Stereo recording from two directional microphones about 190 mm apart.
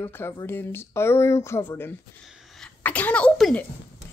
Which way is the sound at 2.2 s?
Centre (ahead or behind).